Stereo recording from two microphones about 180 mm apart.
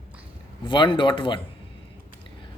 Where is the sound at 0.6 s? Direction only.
25° left (ahead or behind).